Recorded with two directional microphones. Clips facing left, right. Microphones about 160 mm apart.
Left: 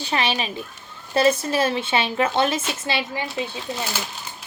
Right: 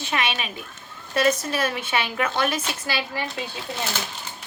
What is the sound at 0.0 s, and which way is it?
A woman's voice, 30° left (ahead or behind).